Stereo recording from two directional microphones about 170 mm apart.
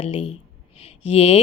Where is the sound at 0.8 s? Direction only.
35° left (ahead or behind).